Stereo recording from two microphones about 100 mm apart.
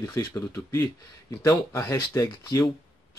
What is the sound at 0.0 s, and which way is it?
Speech, 30° left (ahead or behind).